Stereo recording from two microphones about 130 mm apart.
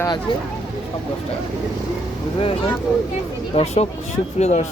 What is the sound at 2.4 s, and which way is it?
Speech, 45° left (ahead or behind).